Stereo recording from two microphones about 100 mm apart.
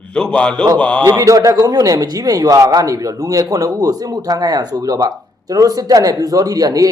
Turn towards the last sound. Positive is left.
turn(degrees=-35)  # may be behind; listen again after turning